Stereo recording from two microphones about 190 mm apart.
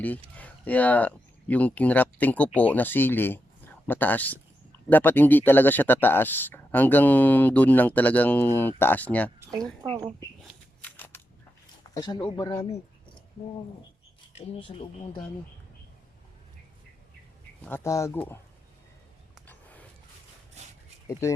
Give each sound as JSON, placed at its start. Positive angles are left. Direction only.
{"t": 0.0, "sound": "speech", "side_deg": 10}
{"t": 9.4, "sound": "a sound", "side_deg": -15}
{"t": 10.8, "sound": "scissors", "side_deg": 10}
{"t": 11.9, "sound": "speech", "side_deg": 20}
{"t": 14.3, "sound": "speech", "side_deg": 35}
{"t": 17.6, "sound": "speech", "side_deg": 10}
{"t": 21.1, "sound": "speech", "side_deg": 15}